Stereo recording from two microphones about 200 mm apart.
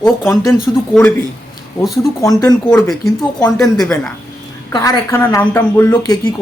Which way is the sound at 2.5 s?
5° left (ahead or behind).